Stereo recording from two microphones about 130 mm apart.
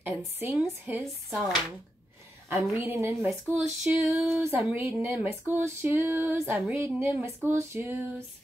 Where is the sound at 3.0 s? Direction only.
20° right (ahead or behind).